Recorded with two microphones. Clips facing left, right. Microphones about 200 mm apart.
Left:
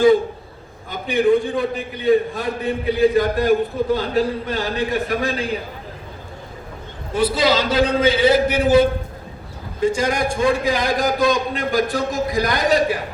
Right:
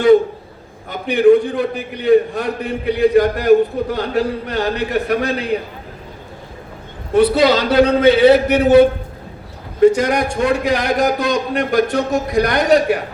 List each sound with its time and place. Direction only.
0.9 s a man's voice: 65° right (ahead or behind)
7.1 s a man's voice: 65° right (ahead or behind)